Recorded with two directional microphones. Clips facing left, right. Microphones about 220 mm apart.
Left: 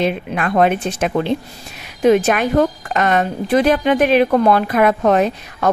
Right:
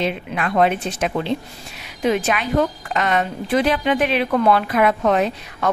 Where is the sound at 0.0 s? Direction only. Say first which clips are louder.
Left 4 dB; 50° left (ahead or behind).